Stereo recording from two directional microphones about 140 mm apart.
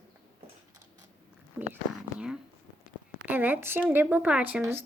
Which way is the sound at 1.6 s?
5° right (ahead or behind).